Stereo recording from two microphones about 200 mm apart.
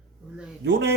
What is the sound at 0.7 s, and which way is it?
Speech, 60° right (ahead or behind).